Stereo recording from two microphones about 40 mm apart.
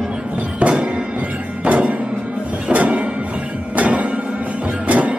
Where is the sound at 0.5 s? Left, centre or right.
Right.